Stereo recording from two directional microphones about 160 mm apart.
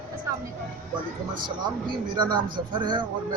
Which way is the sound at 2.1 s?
30° right (ahead or behind).